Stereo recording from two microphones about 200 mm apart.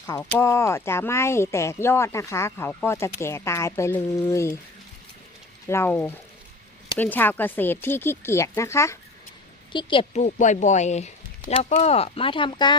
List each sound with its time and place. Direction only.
0.1 s speech: 15° left (ahead or behind)
5.6 s speech: 10° left (ahead or behind)
9.7 s speech: 25° left (ahead or behind)